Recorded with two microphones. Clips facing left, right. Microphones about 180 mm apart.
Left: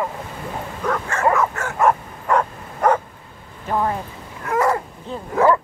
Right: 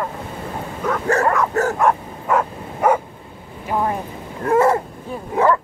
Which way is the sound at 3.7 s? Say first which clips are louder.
Even; 15° right (ahead or behind).